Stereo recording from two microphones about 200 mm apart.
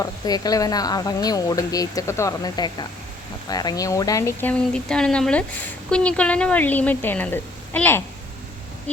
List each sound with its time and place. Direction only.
0.0 s speech: 20° left (ahead or behind)